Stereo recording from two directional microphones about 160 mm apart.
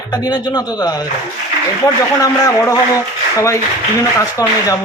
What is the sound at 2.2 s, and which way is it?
Speech, 20° left (ahead or behind).